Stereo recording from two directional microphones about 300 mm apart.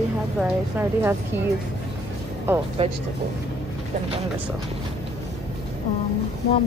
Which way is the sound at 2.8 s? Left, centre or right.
Centre.